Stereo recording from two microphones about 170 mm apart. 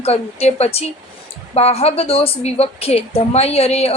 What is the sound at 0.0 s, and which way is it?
A woman's voice, 40° left (ahead or behind).